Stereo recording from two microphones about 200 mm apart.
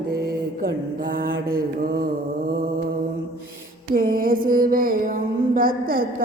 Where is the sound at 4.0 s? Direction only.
45° right (ahead or behind).